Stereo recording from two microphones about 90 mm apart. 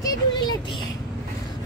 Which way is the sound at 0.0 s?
50° left (ahead or behind).